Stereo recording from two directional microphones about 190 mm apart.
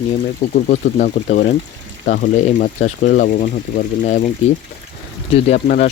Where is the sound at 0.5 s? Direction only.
45° left (ahead or behind).